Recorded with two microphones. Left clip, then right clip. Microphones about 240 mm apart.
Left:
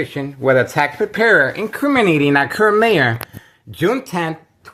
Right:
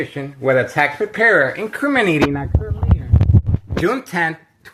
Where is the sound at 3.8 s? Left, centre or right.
Centre.